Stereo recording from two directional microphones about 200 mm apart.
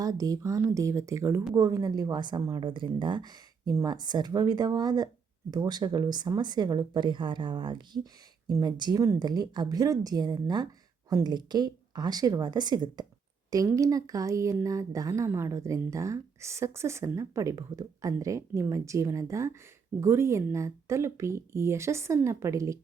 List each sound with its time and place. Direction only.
0.0 s a woman's voice: 15° right (ahead or behind)